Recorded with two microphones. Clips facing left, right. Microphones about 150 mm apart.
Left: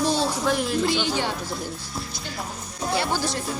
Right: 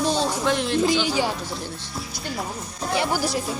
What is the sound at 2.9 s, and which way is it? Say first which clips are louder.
Speech: right 2 dB; 15° right (ahead or behind).